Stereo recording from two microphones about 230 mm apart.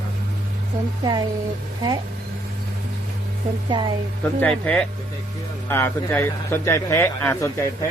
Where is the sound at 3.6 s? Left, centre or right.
Centre.